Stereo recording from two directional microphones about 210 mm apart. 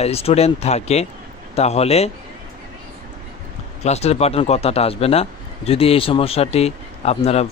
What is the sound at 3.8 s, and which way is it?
Speech, 30° left (ahead or behind).